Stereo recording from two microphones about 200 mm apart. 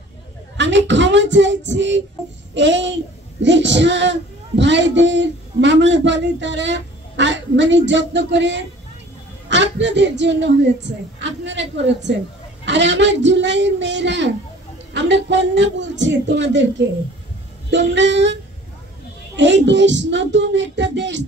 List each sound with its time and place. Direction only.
0.6 s speech: 65° right (ahead or behind)